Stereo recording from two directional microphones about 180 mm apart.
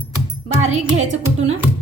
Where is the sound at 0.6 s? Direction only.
40° right (ahead or behind).